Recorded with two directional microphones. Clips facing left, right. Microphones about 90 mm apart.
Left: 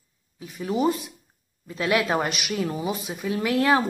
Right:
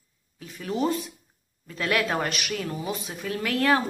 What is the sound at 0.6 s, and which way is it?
A woman's voice, 15° left (ahead or behind).